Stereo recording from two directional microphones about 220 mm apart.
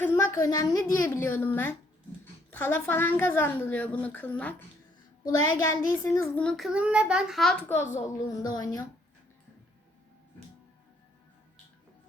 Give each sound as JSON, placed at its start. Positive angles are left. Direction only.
{"t": 0.0, "sound": "a woman's voice", "side_deg": 10}
{"t": 5.7, "sound": "a child's voice", "side_deg": 15}